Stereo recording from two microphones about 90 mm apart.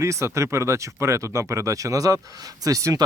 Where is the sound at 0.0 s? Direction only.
35° right (ahead or behind).